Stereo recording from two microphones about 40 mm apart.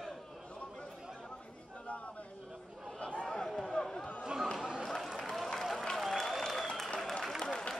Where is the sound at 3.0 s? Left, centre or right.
Left.